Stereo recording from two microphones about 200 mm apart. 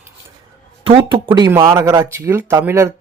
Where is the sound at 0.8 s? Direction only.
25° right (ahead or behind).